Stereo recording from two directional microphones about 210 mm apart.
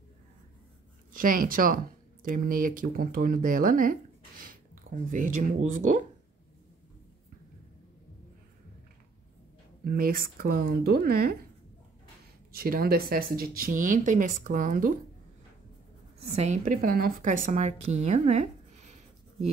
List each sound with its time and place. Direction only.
1.1 s a woman's voice: 40° right (ahead or behind)
9.8 s speech: 45° right (ahead or behind)
12.5 s a woman's voice: 45° right (ahead or behind)
16.3 s a woman's voice: 35° right (ahead or behind)